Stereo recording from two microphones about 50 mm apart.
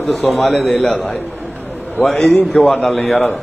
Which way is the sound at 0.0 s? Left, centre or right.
Centre.